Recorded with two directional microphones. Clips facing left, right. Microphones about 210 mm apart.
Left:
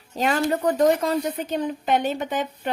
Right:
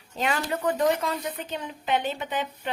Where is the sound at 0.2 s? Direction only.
40° left (ahead or behind).